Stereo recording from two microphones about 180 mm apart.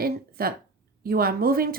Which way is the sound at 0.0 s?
55° right (ahead or behind).